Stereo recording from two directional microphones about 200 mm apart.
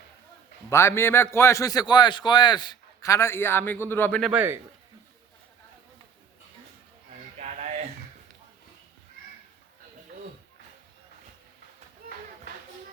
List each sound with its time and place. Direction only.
0.7 s a man's voice: 15° left (ahead or behind)
4.3 s a man's voice: 10° right (ahead or behind)
7.3 s a sound: 35° right (ahead or behind)